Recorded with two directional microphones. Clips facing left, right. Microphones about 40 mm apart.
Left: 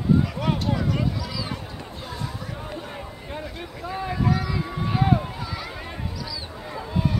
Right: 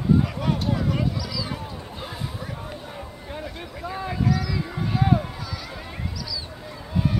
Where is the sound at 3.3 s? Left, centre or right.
Centre.